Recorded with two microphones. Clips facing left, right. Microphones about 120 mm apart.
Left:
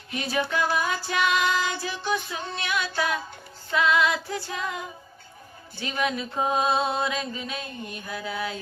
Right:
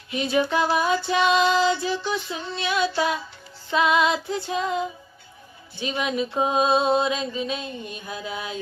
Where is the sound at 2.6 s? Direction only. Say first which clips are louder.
Right 5 dB; 20° right (ahead or behind).